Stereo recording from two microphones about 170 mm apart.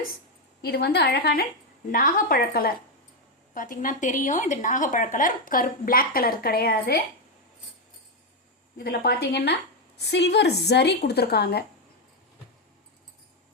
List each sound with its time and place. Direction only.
0.6 s a woman's voice: 70° left (ahead or behind)
1.9 s speech: 55° left (ahead or behind)
8.8 s a woman's voice: 65° left (ahead or behind)
10.0 s a woman's voice: 90° left; by 11.6 s 70° left (ahead or behind)